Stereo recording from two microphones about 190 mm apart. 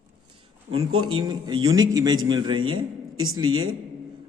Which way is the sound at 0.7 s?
90° right.